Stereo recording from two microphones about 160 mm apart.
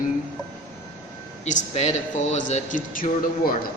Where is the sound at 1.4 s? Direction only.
45° left (ahead or behind); by 3.6 s 65° left (ahead or behind).